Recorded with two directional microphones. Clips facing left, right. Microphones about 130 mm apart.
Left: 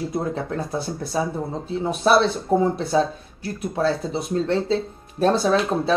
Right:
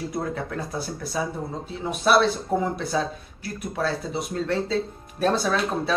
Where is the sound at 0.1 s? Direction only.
25° left (ahead or behind).